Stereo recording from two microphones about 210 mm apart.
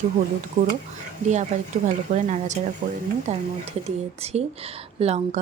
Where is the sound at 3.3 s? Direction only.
35° right (ahead or behind).